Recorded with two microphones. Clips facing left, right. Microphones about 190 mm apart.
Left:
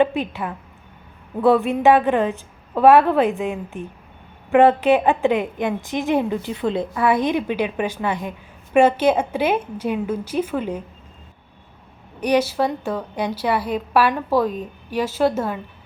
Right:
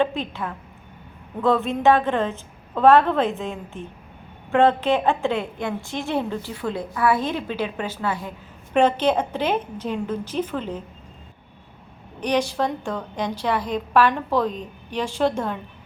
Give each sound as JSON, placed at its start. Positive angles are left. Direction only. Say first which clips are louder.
{"t": 0.0, "sound": "a woman's voice", "louder": "left 4 dB", "side_deg": 15}
{"t": 12.2, "sound": "a woman's voice", "louder": "left 3 dB", "side_deg": 10}